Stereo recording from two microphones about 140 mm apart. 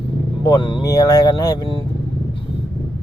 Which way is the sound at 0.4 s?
35° left (ahead or behind).